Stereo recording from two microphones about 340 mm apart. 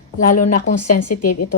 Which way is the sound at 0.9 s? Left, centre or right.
Left.